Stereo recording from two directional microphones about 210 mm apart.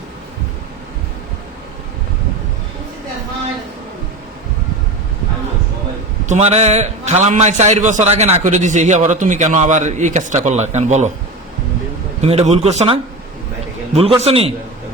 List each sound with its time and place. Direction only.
6.2 s a man's voice: 35° right (ahead or behind)
12.2 s a man's voice: 30° right (ahead or behind)